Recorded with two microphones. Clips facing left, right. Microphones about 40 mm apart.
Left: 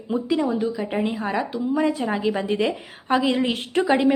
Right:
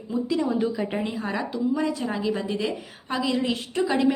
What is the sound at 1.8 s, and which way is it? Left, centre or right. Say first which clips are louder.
A woman's voice: left 4 dB; left.